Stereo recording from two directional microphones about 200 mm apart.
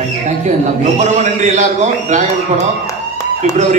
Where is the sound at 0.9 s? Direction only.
35° right (ahead or behind).